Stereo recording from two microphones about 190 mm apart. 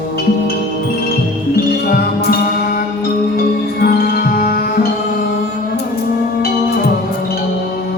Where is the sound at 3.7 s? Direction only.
50° left (ahead or behind).